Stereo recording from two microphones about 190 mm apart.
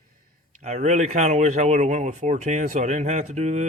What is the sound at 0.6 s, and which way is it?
Speech, 40° right (ahead or behind).